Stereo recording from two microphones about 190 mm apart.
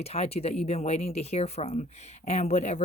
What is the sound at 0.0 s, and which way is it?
Speech, 35° left (ahead or behind).